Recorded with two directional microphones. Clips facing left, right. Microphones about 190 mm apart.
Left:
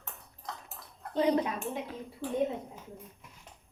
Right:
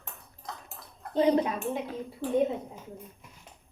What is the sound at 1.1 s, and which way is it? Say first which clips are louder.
Speech: right 3 dB; 30° right (ahead or behind).